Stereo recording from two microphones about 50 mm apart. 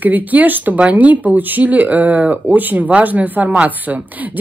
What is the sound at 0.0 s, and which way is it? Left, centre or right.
A woman's voice, right.